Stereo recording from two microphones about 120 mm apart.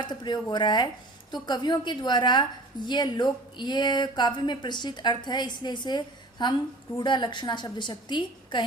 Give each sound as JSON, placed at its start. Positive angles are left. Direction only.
{"t": 0.0, "sound": "a woman's voice", "side_deg": 40}